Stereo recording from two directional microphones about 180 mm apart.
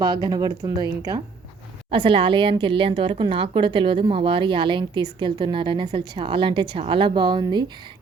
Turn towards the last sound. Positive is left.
turn(degrees=-25)  # may be behind; listen again after turning